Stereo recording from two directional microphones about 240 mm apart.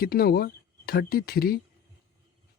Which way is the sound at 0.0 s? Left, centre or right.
Left.